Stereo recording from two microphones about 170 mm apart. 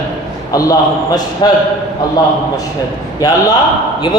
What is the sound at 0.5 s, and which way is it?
A woman's voice, 20° left (ahead or behind).